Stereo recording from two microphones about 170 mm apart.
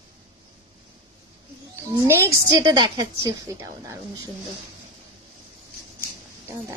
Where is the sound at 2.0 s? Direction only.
20° right (ahead or behind).